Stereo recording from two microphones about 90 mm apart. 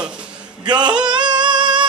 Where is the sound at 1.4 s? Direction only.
55° right (ahead or behind).